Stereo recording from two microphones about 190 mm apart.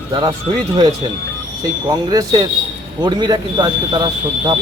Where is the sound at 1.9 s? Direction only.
20° right (ahead or behind).